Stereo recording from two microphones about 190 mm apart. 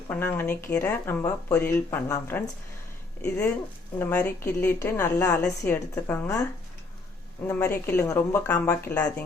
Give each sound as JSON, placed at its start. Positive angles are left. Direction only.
{"t": 0.1, "sound": "a woman's voice", "side_deg": 10}
{"t": 3.9, "sound": "a woman's voice", "side_deg": 10}
{"t": 7.4, "sound": "a woman's voice", "side_deg": 10}